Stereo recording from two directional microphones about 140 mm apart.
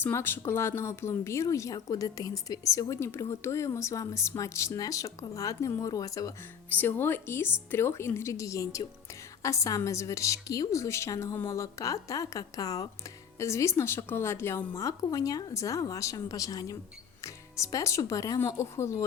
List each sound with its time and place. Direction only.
0.0 s speech: 15° left (ahead or behind)
6.7 s speech: 15° left (ahead or behind)